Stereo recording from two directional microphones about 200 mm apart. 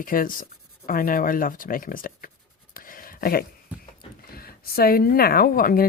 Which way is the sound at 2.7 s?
45° left (ahead or behind).